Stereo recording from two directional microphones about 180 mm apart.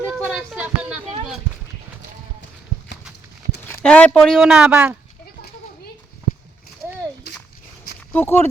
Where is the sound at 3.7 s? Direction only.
5° left (ahead or behind).